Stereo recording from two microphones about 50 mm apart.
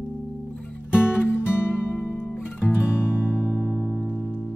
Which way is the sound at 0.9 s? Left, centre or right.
Left.